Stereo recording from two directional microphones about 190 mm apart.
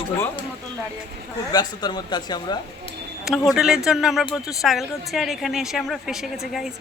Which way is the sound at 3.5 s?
5° right (ahead or behind).